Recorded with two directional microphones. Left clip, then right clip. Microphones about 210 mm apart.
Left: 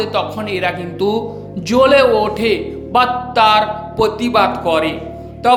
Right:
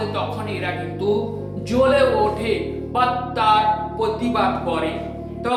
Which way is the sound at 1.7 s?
45° left (ahead or behind).